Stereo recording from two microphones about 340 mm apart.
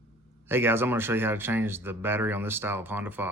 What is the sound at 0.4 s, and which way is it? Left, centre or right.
Speech, centre.